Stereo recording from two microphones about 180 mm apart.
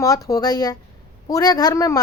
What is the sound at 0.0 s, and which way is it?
Speech, 20° left (ahead or behind).